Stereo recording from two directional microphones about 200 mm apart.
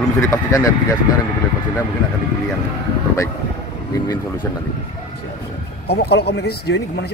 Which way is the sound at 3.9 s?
15° left (ahead or behind).